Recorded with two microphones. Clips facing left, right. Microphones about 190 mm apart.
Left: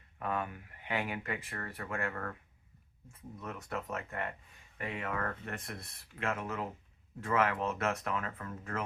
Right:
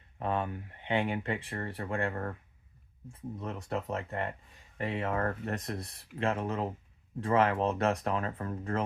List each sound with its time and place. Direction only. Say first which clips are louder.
0.2 s speech: right 4 dB; 30° right (ahead or behind)